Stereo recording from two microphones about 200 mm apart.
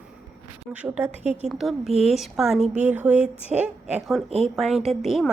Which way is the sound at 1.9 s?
30° right (ahead or behind).